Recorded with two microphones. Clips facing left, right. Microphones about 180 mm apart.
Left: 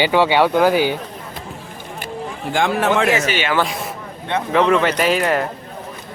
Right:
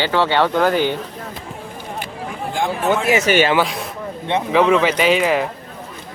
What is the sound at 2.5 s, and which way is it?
Speech, 85° left.